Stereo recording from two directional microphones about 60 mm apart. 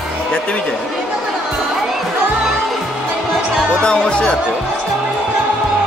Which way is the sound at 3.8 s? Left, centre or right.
Centre.